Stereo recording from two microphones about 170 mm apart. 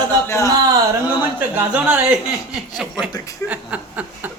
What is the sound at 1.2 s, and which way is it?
Speech, 10° right (ahead or behind).